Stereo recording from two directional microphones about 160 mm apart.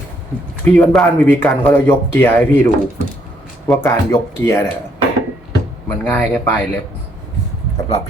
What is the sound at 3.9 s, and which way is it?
Speech, 15° left (ahead or behind).